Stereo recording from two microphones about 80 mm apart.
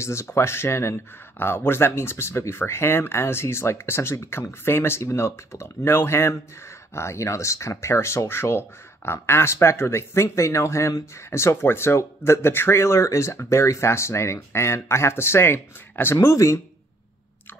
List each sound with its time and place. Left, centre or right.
0.0 s speech: left